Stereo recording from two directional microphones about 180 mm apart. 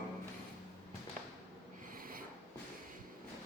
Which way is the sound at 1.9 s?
50° right (ahead or behind).